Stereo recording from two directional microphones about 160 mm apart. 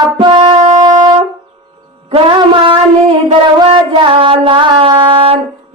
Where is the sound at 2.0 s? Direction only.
35° right (ahead or behind).